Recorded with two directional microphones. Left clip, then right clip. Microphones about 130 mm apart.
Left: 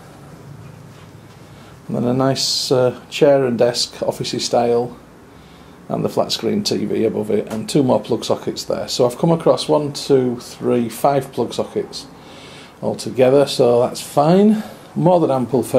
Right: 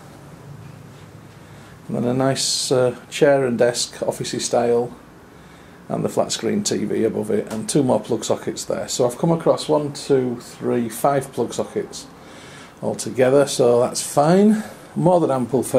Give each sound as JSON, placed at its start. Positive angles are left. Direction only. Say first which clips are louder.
{"t": 1.9, "sound": "speech", "louder": "left 2 dB", "side_deg": 0}
{"t": 5.9, "sound": "speech", "louder": "left 2 dB", "side_deg": -5}